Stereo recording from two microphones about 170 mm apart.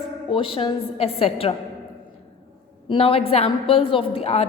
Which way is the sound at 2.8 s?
35° left (ahead or behind).